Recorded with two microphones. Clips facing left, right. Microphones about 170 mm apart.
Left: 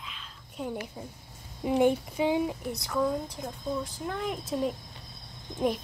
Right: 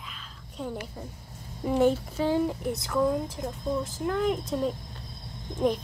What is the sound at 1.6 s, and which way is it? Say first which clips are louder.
Speech: right 1 dB; 10° left (ahead or behind).